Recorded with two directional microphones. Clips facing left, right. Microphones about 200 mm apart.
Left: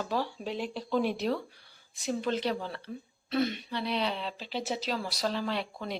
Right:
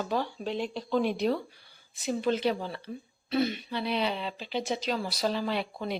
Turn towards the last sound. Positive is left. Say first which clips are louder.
# right 2 dB
turn(degrees=-5)  # may be behind; listen again after turning